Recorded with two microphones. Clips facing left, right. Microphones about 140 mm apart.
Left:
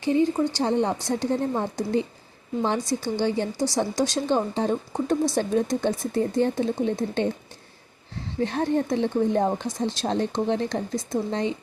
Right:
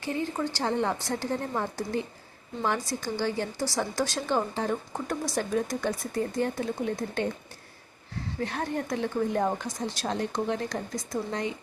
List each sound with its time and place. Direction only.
0.0 s a woman's voice: 20° left (ahead or behind)
8.4 s a woman's voice: 25° left (ahead or behind)